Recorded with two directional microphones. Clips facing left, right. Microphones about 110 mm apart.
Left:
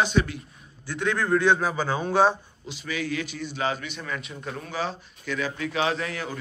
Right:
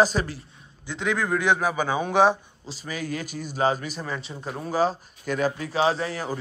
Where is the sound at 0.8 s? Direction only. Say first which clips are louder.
Even; 15° right (ahead or behind).